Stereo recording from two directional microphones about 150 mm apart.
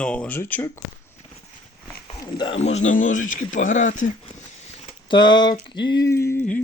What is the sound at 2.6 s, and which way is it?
Speech, 45° left (ahead or behind).